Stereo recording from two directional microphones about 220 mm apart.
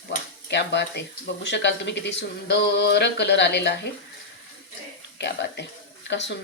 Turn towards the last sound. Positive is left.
turn(degrees=55)  # may be behind; listen again after turning